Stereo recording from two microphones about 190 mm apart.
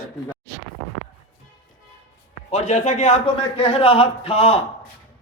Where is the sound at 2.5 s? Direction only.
35° left (ahead or behind).